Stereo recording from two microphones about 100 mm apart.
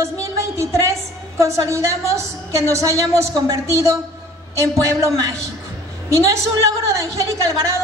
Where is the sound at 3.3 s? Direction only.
45° right (ahead or behind).